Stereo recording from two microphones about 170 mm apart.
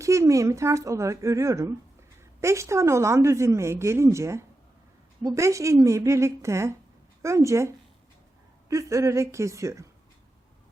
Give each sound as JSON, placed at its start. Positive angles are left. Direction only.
{"t": 0.0, "sound": "a woman's voice", "side_deg": -20}
{"t": 8.7, "sound": "a woman's voice", "side_deg": -20}